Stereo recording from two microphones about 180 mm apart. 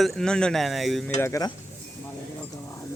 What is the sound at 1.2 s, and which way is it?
Speech, 15° left (ahead or behind).